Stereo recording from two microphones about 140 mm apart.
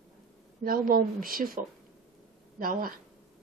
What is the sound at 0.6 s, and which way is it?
Speech, 90° right.